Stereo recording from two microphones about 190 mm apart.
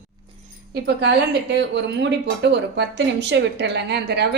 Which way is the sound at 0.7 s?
60° right (ahead or behind).